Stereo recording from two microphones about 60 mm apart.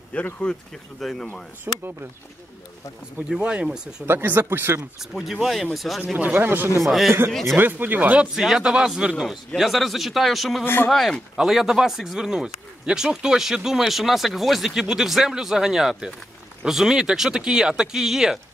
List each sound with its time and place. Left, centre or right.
0.1 s speech: centre
1.0 s speech: centre
1.7 s speech: right
3.3 s speech: centre
4.0 s speech: right
5.1 s speech: centre
6.1 s speech: right
6.8 s speech: centre
7.1 s speech: right
8.4 s speech: centre
9.6 s speech: centre
10.6 s speech: left
10.9 s speech: centre